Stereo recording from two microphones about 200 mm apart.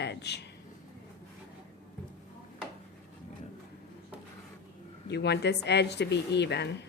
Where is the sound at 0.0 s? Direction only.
55° left (ahead or behind).